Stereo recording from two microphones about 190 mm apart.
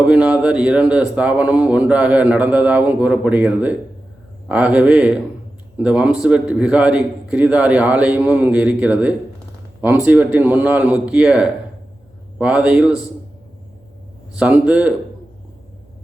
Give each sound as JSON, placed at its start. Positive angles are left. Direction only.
{"t": 0.0, "sound": "a man's voice", "side_deg": -5}
{"t": 14.3, "sound": "a man's voice", "side_deg": -5}